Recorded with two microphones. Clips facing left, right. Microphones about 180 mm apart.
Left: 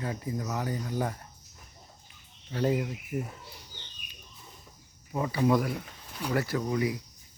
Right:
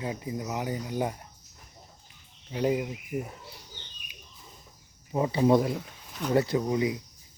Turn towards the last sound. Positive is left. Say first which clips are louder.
# right 2 dB
turn(degrees=-20)  # may be behind; listen again after turning